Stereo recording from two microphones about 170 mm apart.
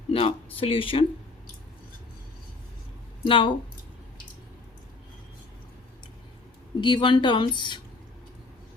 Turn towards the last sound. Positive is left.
turn(degrees=25)  # may be behind; listen again after turning